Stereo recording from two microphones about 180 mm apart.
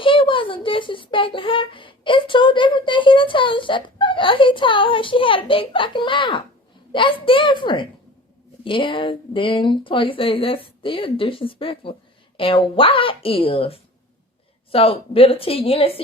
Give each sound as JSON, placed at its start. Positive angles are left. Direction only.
{"t": 0.0, "sound": "speech", "side_deg": 30}